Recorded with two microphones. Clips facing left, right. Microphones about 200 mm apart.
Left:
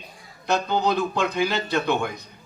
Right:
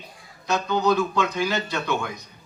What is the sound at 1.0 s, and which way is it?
Speech, 55° left (ahead or behind).